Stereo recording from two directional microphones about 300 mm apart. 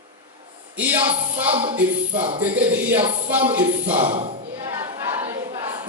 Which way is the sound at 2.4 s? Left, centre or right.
Centre.